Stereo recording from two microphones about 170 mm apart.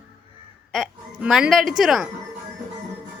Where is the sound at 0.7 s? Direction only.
Centre (ahead or behind).